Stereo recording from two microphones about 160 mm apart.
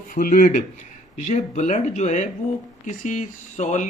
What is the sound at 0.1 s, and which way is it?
Speech, 60° left (ahead or behind).